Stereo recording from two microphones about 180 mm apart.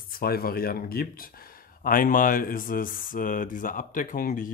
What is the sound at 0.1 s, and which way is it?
Speech, 55° left (ahead or behind).